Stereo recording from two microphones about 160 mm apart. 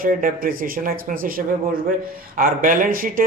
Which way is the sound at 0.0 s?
60° right (ahead or behind).